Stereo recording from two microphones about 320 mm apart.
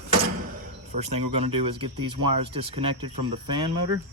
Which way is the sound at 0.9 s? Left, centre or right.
Centre.